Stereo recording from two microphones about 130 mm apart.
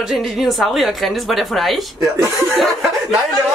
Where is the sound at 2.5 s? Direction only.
Centre (ahead or behind).